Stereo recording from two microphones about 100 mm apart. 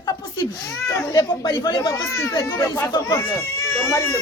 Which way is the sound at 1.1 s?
45° left (ahead or behind).